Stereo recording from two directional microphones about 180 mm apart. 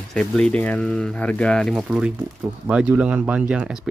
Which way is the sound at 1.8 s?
5° right (ahead or behind).